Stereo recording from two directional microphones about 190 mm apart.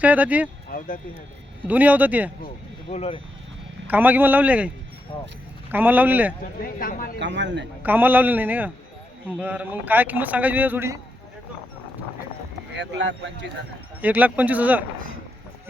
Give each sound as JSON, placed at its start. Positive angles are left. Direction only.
{"t": 0.0, "sound": "a man's voice", "side_deg": -10}
{"t": 1.6, "sound": "a man's voice", "side_deg": -10}
{"t": 2.9, "sound": "speech", "side_deg": 30}
{"t": 3.8, "sound": "a man's voice", "side_deg": -10}
{"t": 5.7, "sound": "a man's voice", "side_deg": -10}
{"t": 6.6, "sound": "speech", "side_deg": 50}
{"t": 7.2, "sound": "speech", "side_deg": -70}
{"t": 7.8, "sound": "a man's voice", "side_deg": -10}
{"t": 12.7, "sound": "speech", "side_deg": -70}
{"t": 14.0, "sound": "a man's voice", "side_deg": -10}